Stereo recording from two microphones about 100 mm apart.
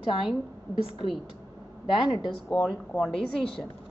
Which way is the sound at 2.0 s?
55° left (ahead or behind).